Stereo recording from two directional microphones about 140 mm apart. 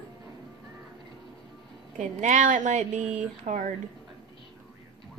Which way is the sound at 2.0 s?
65° right (ahead or behind).